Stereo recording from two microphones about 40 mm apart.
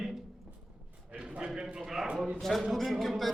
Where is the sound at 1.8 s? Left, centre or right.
Centre.